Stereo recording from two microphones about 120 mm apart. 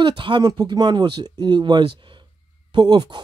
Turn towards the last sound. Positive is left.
turn(degrees=-40)  # may be behind; listen again after turning